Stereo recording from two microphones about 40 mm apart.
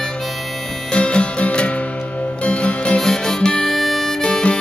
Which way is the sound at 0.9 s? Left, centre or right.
Left.